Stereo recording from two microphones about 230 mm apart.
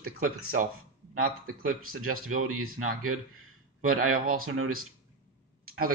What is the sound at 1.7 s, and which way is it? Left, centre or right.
Speech, right.